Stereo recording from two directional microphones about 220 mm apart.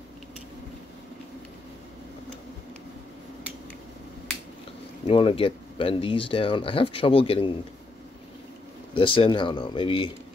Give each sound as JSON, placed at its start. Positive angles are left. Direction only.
{"t": 5.0, "sound": "speech", "side_deg": 25}
{"t": 8.9, "sound": "speech", "side_deg": 25}